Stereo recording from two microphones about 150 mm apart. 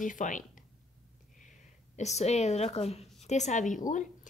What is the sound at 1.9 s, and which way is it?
A woman's voice, 45° left (ahead or behind).